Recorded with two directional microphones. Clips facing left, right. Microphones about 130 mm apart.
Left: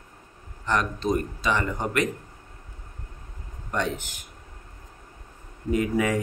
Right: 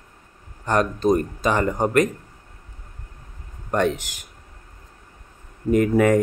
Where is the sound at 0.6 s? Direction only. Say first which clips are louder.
Right 6 dB; 45° right (ahead or behind).